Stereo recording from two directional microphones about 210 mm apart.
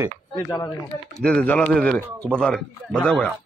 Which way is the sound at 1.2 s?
5° left (ahead or behind).